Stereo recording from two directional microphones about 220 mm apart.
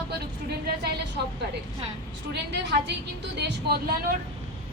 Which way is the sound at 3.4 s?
45° right (ahead or behind).